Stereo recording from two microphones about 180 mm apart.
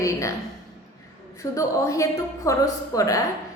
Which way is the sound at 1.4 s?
15° left (ahead or behind).